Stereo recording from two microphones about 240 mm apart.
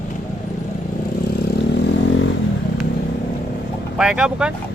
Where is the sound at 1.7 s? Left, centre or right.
Left.